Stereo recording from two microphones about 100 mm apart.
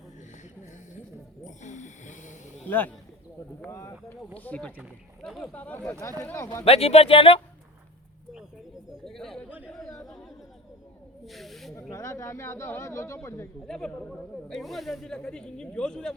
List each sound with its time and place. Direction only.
2.6 s speech: 15° left (ahead or behind)
3.7 s speech: 30° left (ahead or behind)
4.4 s speech: 15° left (ahead or behind)
5.2 s speech: centre (ahead or behind)
5.5 s speech: 20° left (ahead or behind)
5.9 s speech: 30° left (ahead or behind)
6.7 s speech: 85° left; by 7.4 s 65° left (ahead or behind)
8.9 s speech: 5° left (ahead or behind)
11.7 s speech: 30° left (ahead or behind)
13.7 s speech: 10° left (ahead or behind)